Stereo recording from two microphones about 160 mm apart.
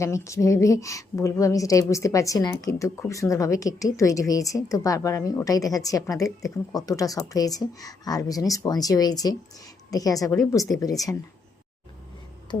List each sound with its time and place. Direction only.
0.0 s a woman's voice: 20° left (ahead or behind)